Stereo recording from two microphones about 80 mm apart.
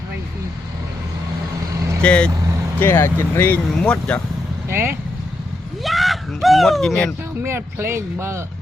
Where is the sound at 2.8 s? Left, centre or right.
Left.